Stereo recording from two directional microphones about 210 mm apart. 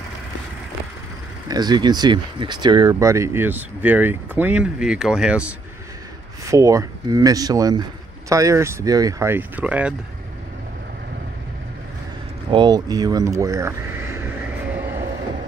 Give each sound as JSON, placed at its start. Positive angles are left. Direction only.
{"t": 1.5, "sound": "speech", "side_deg": -20}
{"t": 12.4, "sound": "speech", "side_deg": -20}